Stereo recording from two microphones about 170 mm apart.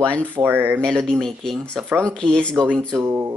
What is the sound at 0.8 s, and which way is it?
Speech, 5° left (ahead or behind).